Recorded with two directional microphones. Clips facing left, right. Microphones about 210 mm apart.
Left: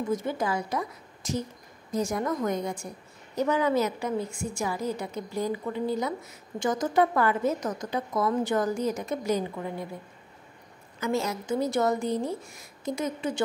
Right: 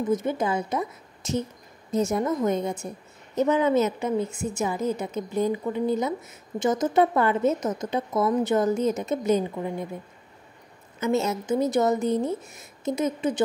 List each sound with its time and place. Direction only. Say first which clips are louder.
0.0 s a woman's voice: right 4 dB; 20° right (ahead or behind)
11.0 s a woman's voice: right 4 dB; 25° right (ahead or behind)